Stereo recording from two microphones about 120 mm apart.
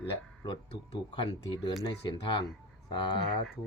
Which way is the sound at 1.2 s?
40° left (ahead or behind).